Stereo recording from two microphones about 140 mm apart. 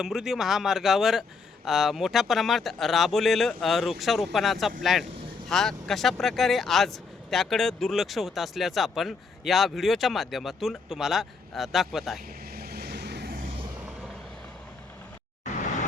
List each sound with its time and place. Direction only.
0.0 s speech: 5° right (ahead or behind)
12.5 s vehicle: 90° right